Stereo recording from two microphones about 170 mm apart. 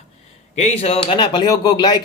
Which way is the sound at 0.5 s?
40° left (ahead or behind).